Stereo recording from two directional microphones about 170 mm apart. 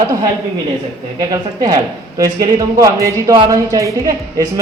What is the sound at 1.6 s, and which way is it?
Speech, 20° right (ahead or behind).